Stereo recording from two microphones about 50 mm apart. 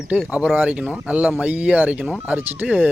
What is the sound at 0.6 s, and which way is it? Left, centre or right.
Speech, right.